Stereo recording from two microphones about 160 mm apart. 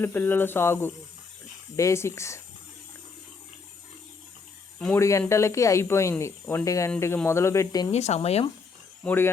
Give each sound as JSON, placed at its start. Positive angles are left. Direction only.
{"t": 0.0, "sound": "speech", "side_deg": 10}
{"t": 4.9, "sound": "speech", "side_deg": 20}
{"t": 7.9, "sound": "speech", "side_deg": 45}
{"t": 9.0, "sound": "speech", "side_deg": 15}